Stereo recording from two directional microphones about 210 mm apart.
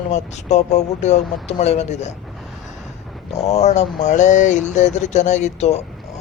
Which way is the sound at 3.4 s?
30° left (ahead or behind).